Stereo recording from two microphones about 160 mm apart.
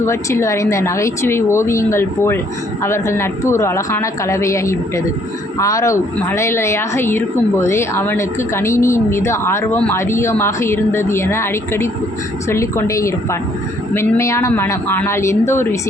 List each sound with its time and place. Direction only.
0.0 s a woman's voice: 15° left (ahead or behind)